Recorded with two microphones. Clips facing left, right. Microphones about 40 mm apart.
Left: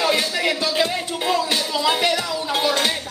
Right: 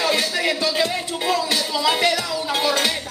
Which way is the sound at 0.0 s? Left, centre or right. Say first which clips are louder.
Left 1 dB; centre.